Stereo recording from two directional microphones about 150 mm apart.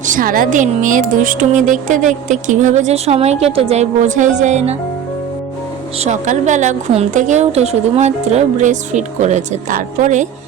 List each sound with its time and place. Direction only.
0.0 s a woman's voice: 65° right (ahead or behind); by 4.8 s 45° right (ahead or behind)
6.0 s a woman's voice: 50° right (ahead or behind)